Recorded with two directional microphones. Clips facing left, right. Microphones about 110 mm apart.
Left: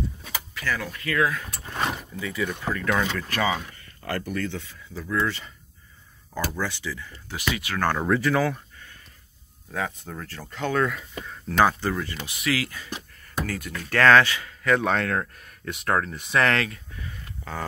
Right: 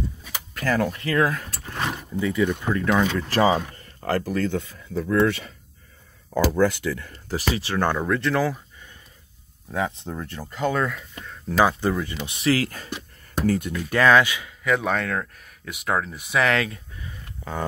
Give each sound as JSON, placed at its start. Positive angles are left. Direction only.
{"t": 0.6, "sound": "speech", "side_deg": -45}
{"t": 0.9, "sound": "speech", "side_deg": -30}
{"t": 1.2, "sound": "speech", "side_deg": -40}
{"t": 2.1, "sound": "speech", "side_deg": -15}
{"t": 3.3, "sound": "speech", "side_deg": -35}
{"t": 6.6, "sound": "speech", "side_deg": -55}
{"t": 7.2, "sound": "speech", "side_deg": -35}
{"t": 8.0, "sound": "speech", "side_deg": 5}
{"t": 9.7, "sound": "speech", "side_deg": -20}
{"t": 11.4, "sound": "speech", "side_deg": -10}
{"t": 13.4, "sound": "speech", "side_deg": -25}
{"t": 13.7, "sound": "speech", "side_deg": -15}
{"t": 16.6, "sound": "a sound", "side_deg": -25}